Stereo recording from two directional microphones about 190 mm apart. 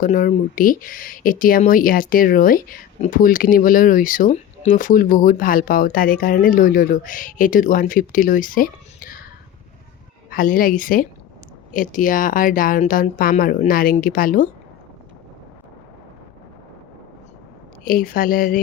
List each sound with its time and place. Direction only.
0.0 s speech: 45° left (ahead or behind)
10.2 s speech: 50° left (ahead or behind)
17.8 s speech: 45° left (ahead or behind)